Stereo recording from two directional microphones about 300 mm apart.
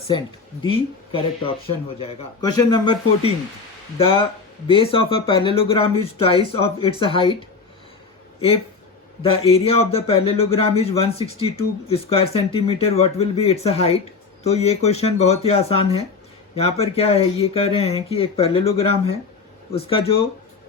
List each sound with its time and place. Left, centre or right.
0.6 s a man's voice: centre
9.3 s a man's voice: centre